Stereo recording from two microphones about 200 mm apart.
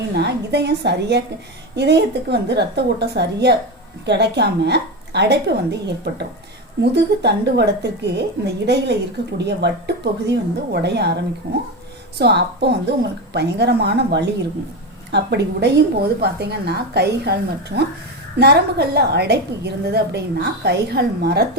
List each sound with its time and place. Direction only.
0.1 s a woman's voice: 55° right (ahead or behind)